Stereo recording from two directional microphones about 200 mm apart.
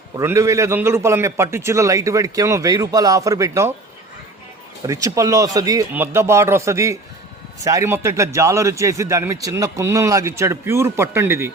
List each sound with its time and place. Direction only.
0.2 s a man's voice: 15° right (ahead or behind)
4.9 s a man's voice: 15° right (ahead or behind)